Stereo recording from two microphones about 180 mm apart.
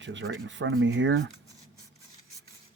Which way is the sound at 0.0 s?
90° right.